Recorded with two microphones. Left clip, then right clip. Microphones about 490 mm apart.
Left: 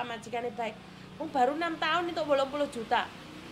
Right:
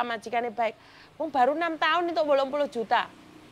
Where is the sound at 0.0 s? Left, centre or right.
Right.